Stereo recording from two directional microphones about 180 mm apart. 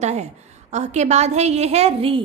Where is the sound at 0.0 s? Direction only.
40° right (ahead or behind).